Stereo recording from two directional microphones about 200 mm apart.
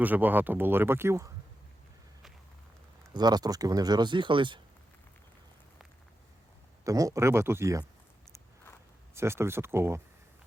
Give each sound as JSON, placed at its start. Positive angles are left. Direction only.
{"t": 0.0, "sound": "speech", "side_deg": -10}
{"t": 3.2, "sound": "speech", "side_deg": -20}
{"t": 6.8, "sound": "speech", "side_deg": -15}
{"t": 9.1, "sound": "speech", "side_deg": -15}